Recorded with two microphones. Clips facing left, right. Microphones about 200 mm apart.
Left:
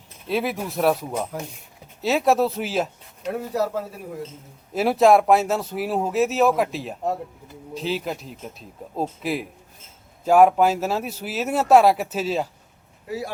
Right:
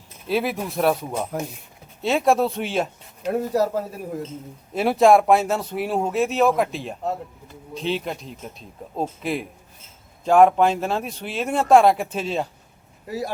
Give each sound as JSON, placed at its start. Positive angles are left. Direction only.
{"t": 0.3, "sound": "speech", "side_deg": 0}
{"t": 3.5, "sound": "speech", "side_deg": -40}
{"t": 4.7, "sound": "speech", "side_deg": 0}
{"t": 13.1, "sound": "speech", "side_deg": -40}